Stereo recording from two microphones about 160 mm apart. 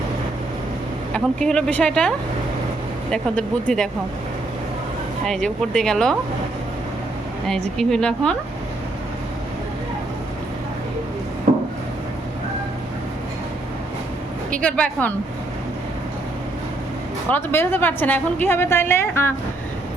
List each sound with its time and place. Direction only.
1.1 s speech: 5° left (ahead or behind)
5.2 s speech: 5° left (ahead or behind)
7.8 s speech: 5° left (ahead or behind)
11.5 s a sound: 45° right (ahead or behind)
14.6 s a woman's voice: 10° left (ahead or behind)
17.2 s a woman's voice: 15° left (ahead or behind)